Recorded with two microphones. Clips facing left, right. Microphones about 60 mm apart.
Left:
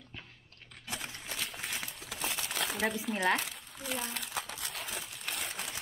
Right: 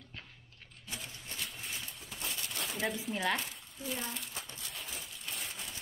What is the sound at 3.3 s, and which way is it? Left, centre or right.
Crumpling, left.